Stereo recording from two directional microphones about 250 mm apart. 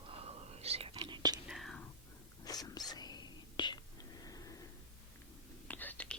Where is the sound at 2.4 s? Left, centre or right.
Centre.